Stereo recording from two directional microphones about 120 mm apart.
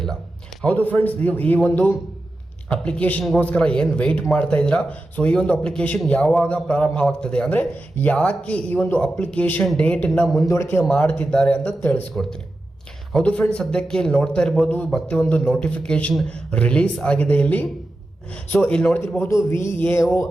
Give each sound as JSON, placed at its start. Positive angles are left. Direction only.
{"t": 0.6, "sound": "a man's voice", "side_deg": 10}
{"t": 7.6, "sound": "a man's voice", "side_deg": 20}
{"t": 10.3, "sound": "a man's voice", "side_deg": 25}
{"t": 13.1, "sound": "a man's voice", "side_deg": 10}
{"t": 19.2, "sound": "speech", "side_deg": 25}